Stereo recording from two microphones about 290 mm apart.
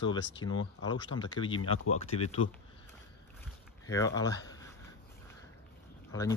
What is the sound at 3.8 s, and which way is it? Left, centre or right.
Speech, centre.